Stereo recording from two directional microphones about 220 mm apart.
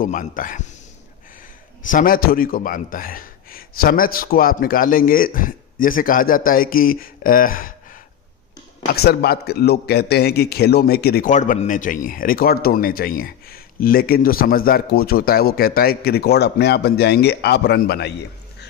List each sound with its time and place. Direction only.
0.0 s a man's voice: 35° left (ahead or behind)
1.9 s a man's voice: 40° left (ahead or behind)
9.0 s a man's voice: 45° left (ahead or behind)